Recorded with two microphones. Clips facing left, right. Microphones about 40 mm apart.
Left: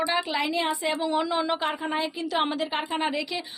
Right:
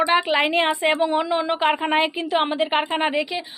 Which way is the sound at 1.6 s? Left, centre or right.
Right.